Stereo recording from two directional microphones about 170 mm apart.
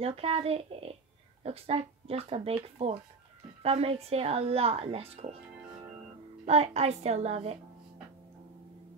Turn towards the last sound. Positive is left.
turn(degrees=-35)  # may be behind; listen again after turning